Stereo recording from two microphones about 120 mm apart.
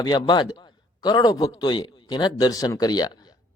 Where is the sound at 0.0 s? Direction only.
35° left (ahead or behind).